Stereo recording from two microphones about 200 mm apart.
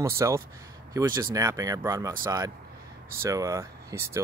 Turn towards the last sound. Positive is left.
turn(degrees=-15)  # may be behind; listen again after turning